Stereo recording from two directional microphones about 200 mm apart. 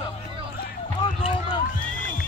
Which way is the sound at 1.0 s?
25° left (ahead or behind).